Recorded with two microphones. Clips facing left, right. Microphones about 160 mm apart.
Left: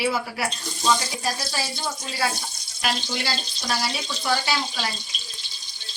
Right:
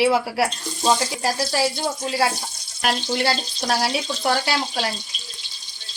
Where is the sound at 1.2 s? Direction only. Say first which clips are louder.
Right 7 dB; 90° right.